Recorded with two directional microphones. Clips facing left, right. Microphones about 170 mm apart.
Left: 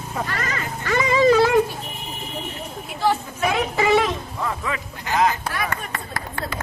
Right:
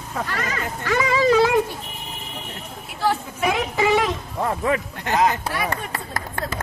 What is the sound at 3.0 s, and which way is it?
Speech, 10° right (ahead or behind).